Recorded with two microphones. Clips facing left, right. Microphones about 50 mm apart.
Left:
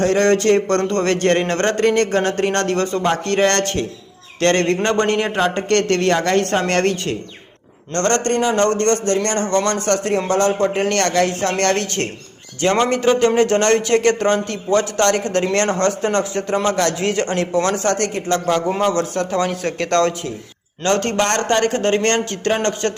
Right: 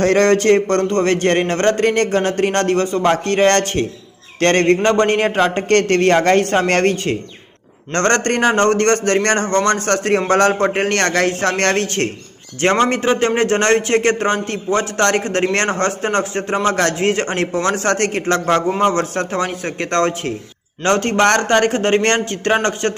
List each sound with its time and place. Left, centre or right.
0.0 s a man's voice: right; by 2.3 s centre
2.4 s speech: right
2.8 s a man's voice: centre
3.1 s a man's voice: right
7.9 s a man's voice: right
9.5 s a man's voice: right
19.4 s speech: right